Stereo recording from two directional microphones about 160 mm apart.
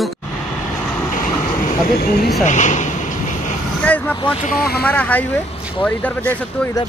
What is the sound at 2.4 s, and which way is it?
Speech, 50° left (ahead or behind).